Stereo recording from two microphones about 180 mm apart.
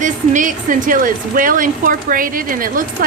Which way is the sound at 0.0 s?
45° right (ahead or behind).